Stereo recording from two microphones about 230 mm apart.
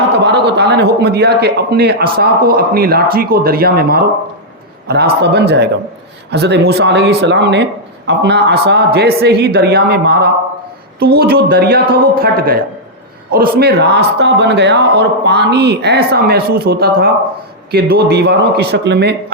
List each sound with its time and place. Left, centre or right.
0.1 s a man's voice: right
5.2 s speech: right